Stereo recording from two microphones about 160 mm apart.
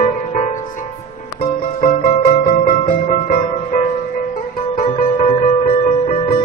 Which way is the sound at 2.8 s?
40° left (ahead or behind).